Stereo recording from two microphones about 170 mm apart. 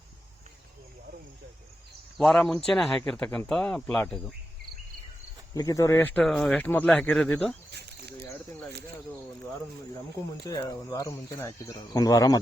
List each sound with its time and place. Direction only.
2.1 s speech: centre (ahead or behind)
5.5 s speech: 20° left (ahead or behind)
6.2 s speech: centre (ahead or behind)
7.7 s a sound: 75° right (ahead or behind)
10.4 s speech: 20° left (ahead or behind)